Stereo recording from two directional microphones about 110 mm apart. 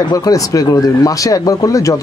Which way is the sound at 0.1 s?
30° left (ahead or behind).